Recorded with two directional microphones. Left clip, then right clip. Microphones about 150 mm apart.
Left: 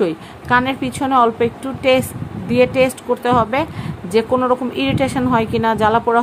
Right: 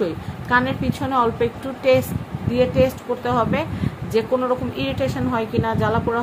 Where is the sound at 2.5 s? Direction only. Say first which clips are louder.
Left 4 dB; 60° left (ahead or behind).